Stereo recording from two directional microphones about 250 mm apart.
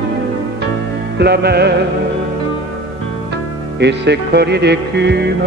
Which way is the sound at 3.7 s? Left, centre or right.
Right.